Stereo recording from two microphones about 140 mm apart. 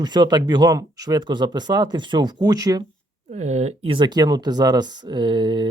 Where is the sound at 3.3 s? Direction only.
50° right (ahead or behind).